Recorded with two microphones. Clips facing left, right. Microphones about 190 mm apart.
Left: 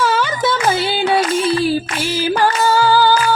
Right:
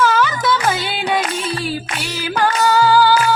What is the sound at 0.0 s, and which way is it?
Music, 30° left (ahead or behind).